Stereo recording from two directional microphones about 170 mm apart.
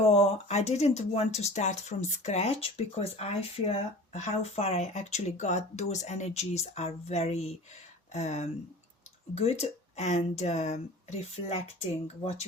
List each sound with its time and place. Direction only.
0.0 s speech: 35° left (ahead or behind)